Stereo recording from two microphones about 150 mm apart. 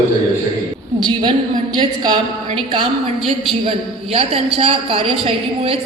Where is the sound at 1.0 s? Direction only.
30° right (ahead or behind).